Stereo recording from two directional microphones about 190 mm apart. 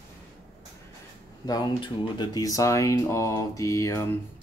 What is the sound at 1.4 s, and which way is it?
Speech, 20° left (ahead or behind).